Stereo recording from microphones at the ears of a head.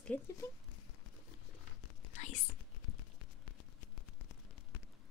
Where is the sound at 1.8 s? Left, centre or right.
Left.